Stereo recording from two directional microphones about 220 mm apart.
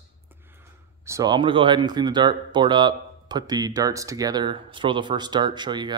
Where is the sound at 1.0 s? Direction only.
15° right (ahead or behind).